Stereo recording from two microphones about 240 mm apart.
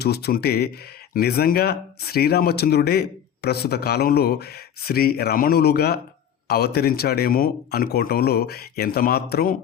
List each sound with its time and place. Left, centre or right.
0.0 s speech: left